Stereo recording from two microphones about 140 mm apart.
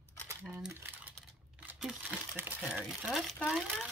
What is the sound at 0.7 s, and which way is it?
Typing, 15° right (ahead or behind).